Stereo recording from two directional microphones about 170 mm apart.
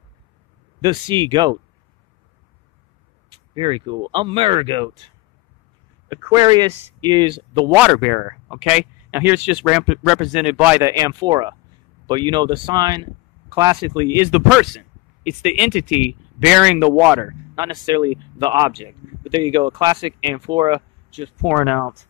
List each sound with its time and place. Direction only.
0.7 s speech: 25° right (ahead or behind)
3.5 s speech: 30° right (ahead or behind)
7.9 s speech: centre (ahead or behind); by 14.3 s 20° right (ahead or behind)
14.3 s speech: centre (ahead or behind)
17.6 s speech: 25° right (ahead or behind)
21.5 s speech: 5° right (ahead or behind)